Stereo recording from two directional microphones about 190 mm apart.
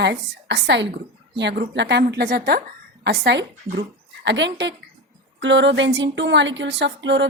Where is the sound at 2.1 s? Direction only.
50° right (ahead or behind); by 7.2 s 70° right (ahead or behind).